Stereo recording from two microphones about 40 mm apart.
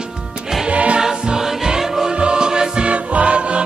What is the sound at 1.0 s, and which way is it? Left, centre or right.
Music, centre.